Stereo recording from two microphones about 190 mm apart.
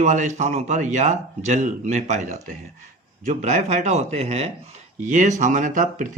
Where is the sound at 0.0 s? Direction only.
40° right (ahead or behind).